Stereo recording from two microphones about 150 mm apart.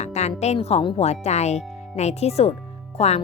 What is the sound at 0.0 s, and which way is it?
A woman's voice, 50° left (ahead or behind).